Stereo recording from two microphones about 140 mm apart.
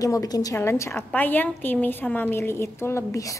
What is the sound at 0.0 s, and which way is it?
A woman's voice, 25° left (ahead or behind).